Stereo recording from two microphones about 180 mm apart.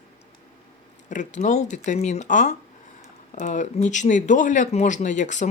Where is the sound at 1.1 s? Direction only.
45° left (ahead or behind).